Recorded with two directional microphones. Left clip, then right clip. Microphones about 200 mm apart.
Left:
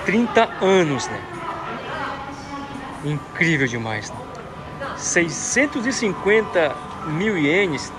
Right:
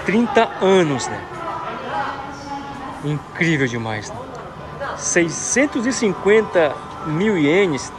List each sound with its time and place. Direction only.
0.0 s speech: 20° right (ahead or behind)
3.1 s speech: 20° right (ahead or behind)
5.0 s speech: 25° right (ahead or behind)